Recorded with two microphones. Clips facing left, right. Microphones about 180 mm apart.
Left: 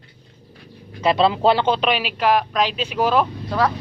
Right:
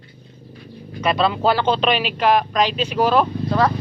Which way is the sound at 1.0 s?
25° left (ahead or behind).